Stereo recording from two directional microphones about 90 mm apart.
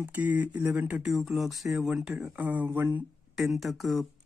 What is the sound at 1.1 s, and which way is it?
Speech, 5° right (ahead or behind).